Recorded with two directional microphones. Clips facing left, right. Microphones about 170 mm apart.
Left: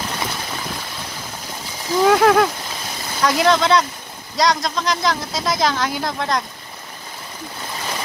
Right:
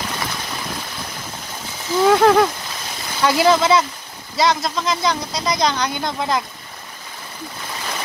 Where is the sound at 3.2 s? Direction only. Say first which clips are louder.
Right 1 dB; 5° right (ahead or behind).